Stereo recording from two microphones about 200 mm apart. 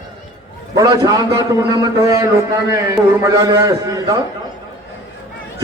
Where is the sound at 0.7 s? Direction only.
20° right (ahead or behind).